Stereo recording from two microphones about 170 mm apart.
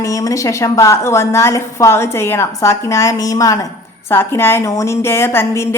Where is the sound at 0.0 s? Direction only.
20° left (ahead or behind).